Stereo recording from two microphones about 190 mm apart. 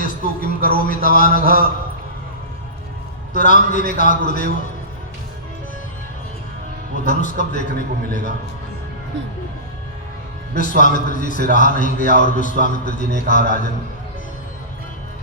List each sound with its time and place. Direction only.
0.0 s a sound: 50° left (ahead or behind)
3.3 s a man's voice: 40° left (ahead or behind)
6.9 s a man's voice: 40° left (ahead or behind)
10.5 s a man's voice: 45° left (ahead or behind)